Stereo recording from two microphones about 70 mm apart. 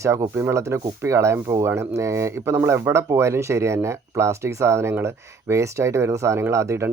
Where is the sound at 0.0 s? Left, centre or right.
Right.